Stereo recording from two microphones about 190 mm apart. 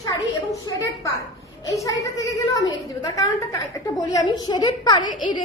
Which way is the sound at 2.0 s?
15° left (ahead or behind).